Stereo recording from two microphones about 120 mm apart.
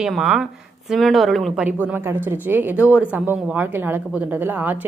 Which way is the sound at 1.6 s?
15° right (ahead or behind).